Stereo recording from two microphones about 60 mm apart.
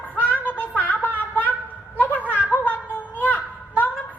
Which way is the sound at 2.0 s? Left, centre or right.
Left.